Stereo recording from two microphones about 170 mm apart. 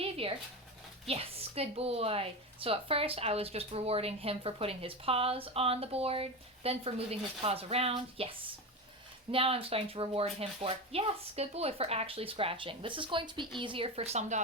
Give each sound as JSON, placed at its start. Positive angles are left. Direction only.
{"t": 0.0, "sound": "dog", "side_deg": -35}
{"t": 1.0, "sound": "a woman's voice", "side_deg": -35}